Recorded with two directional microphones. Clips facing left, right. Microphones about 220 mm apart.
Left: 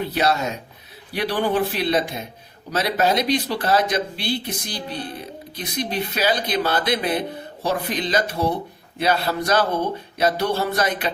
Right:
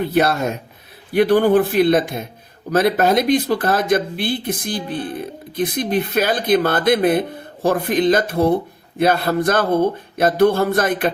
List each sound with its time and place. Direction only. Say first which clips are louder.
0.0 s speech: right 4 dB; 55° right (ahead or behind)